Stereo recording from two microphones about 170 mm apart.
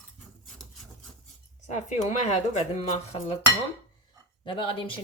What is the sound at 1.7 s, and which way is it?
A woman's voice, 45° left (ahead or behind).